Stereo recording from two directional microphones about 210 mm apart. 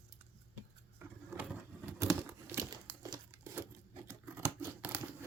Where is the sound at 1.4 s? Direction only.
10° right (ahead or behind).